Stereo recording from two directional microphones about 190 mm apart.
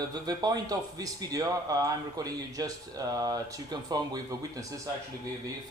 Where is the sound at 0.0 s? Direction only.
20° right (ahead or behind).